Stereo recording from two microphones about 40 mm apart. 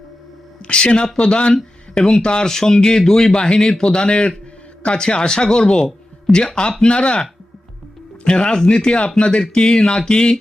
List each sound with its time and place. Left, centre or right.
0.7 s speech: left
8.2 s speech: left